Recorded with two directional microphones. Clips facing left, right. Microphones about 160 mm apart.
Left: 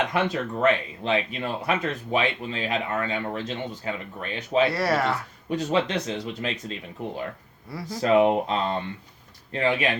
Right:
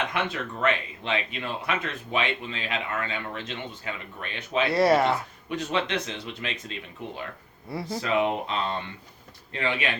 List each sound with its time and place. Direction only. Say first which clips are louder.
0.1 s speech: left 5 dB; 40° left (ahead or behind)
4.7 s speech: right 4 dB; 20° right (ahead or behind)
5.5 s speech: left 4 dB; 40° left (ahead or behind)
7.7 s speech: right 2 dB; 25° right (ahead or behind)
8.0 s speech: left 7 dB; 40° left (ahead or behind)